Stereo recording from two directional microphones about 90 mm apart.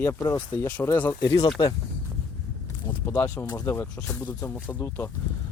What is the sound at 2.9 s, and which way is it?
Speech, 25° left (ahead or behind).